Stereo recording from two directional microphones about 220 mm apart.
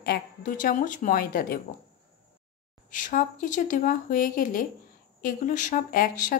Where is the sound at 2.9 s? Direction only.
35° left (ahead or behind).